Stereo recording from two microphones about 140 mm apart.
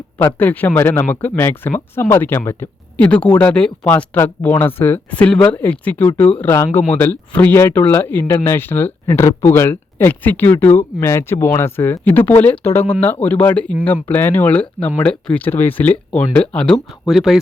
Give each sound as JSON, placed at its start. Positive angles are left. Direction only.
{"t": 0.2, "sound": "speech", "side_deg": 15}